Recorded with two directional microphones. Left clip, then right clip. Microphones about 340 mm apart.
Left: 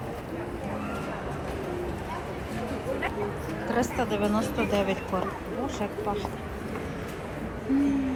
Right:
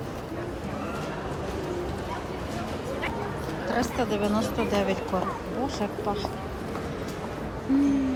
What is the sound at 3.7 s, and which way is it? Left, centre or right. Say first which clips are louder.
A woman's voice: even; centre.